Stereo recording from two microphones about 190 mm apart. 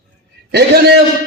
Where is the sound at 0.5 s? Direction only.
60° right (ahead or behind).